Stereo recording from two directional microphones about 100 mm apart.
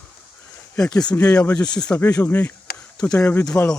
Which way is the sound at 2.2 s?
25° left (ahead or behind).